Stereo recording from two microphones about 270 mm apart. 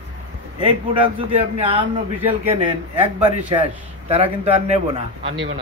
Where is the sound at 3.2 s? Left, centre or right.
Right.